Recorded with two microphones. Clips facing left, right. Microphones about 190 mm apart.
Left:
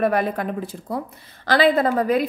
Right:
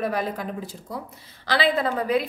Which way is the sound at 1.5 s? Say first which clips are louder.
Left 5 dB; 45° left (ahead or behind).